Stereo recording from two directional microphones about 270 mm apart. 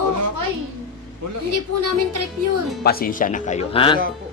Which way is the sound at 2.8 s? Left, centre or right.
Left.